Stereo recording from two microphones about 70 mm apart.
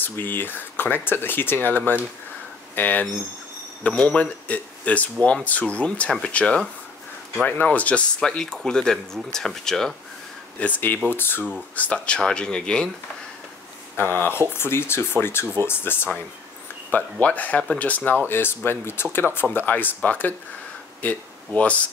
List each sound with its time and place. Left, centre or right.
0.0 s speech: left; by 9.9 s centre
10.6 s speech: left
11.7 s speech: centre
14.1 s speech: left
16.9 s speech: left
21.5 s speech: centre